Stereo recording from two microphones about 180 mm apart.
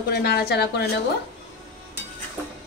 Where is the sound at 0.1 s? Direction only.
60° left (ahead or behind).